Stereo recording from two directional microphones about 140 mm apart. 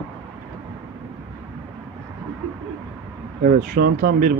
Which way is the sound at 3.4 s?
90° right.